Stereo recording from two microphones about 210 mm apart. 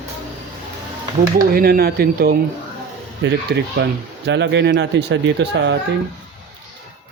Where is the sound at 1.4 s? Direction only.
45° right (ahead or behind).